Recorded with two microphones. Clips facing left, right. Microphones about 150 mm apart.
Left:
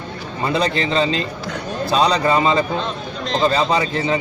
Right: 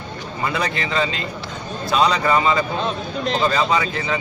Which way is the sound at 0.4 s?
30° left (ahead or behind).